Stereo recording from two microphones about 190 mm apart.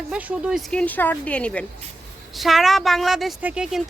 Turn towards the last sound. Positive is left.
turn(degrees=-5)  # may be behind; listen again after turning